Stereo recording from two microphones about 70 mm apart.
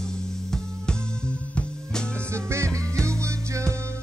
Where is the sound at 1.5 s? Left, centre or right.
Centre.